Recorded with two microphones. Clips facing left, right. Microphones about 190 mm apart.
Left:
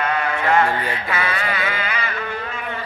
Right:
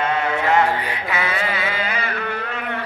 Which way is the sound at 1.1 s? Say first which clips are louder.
Right 2 dB; 20° right (ahead or behind).